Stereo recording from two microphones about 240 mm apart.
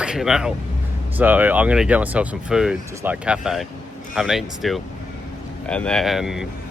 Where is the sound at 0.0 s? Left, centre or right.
Centre.